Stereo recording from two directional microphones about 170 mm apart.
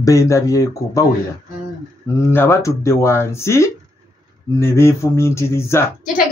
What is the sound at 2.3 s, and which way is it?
A man's voice, 15° left (ahead or behind).